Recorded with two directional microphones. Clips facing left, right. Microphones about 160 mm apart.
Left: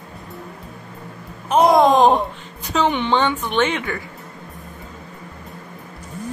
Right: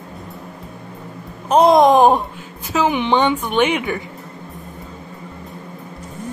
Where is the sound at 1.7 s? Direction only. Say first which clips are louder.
Right 1 dB; 15° right (ahead or behind).